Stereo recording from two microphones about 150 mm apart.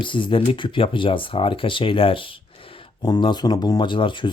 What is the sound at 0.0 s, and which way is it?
Speech, 35° left (ahead or behind).